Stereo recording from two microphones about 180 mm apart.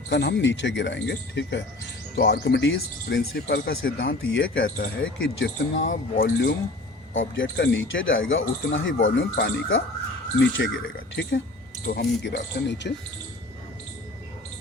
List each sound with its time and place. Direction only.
0.1 s speech: 70° left (ahead or behind)
3.5 s speech: 75° left (ahead or behind)
5.1 s speech: 80° left
5.9 s speech: 55° left (ahead or behind)
7.1 s speech: 90° left
10.4 s speech: 90° left
11.1 s speech: 75° left (ahead or behind)